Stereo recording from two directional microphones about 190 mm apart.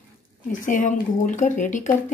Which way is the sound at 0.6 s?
45° left (ahead or behind).